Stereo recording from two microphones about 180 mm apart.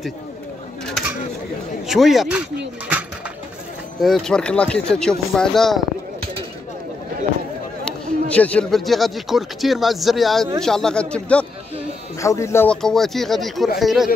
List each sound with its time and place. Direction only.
1.9 s speech: centre (ahead or behind)
4.0 s speech: centre (ahead or behind)
7.8 s speech: 5° left (ahead or behind)
12.2 s speech: 15° left (ahead or behind)
12.6 s speech: centre (ahead or behind)